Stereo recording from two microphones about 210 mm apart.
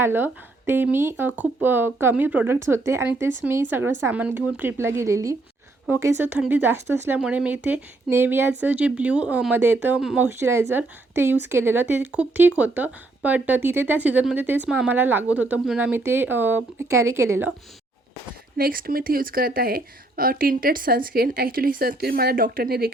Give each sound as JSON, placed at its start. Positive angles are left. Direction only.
{"t": 0.0, "sound": "speech", "side_deg": -10}
{"t": 18.5, "sound": "speech", "side_deg": -45}